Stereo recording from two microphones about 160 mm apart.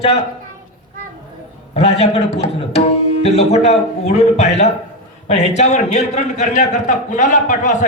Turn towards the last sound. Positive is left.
turn(degrees=50)  # may be behind; listen again after turning